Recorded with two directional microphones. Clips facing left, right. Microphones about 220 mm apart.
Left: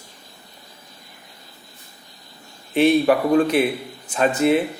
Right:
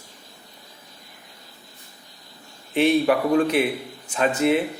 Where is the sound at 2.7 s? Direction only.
40° left (ahead or behind).